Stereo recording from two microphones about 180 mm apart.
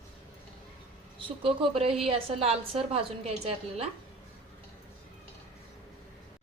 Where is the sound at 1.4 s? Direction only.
30° right (ahead or behind).